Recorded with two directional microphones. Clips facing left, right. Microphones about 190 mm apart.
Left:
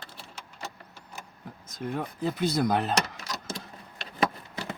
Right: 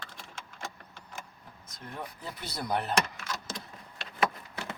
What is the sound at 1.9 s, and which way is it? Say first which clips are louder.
Speech: left 10 dB; 90° left.